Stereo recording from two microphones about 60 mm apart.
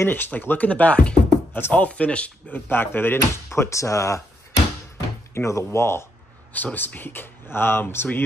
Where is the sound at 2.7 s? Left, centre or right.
Left.